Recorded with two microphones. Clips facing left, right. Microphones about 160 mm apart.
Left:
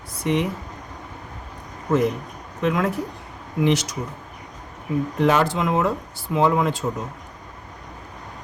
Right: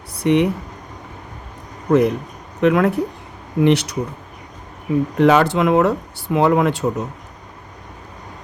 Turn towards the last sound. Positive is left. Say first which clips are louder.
# right 4 dB
turn(degrees=-65)  # may be behind; listen again after turning